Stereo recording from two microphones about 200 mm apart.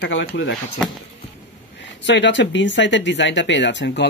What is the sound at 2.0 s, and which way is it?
Speech, 65° left (ahead or behind).